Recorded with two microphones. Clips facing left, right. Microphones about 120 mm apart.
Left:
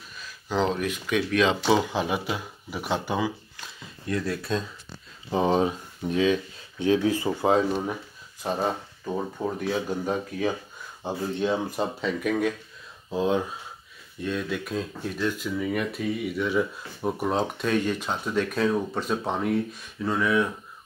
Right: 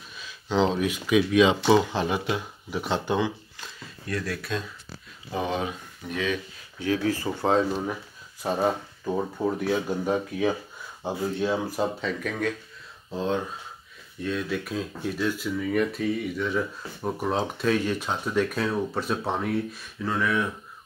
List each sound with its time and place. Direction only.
0.2 s speech: centre (ahead or behind)
4.1 s speech: 25° left (ahead or behind)
7.2 s speech: 5° left (ahead or behind)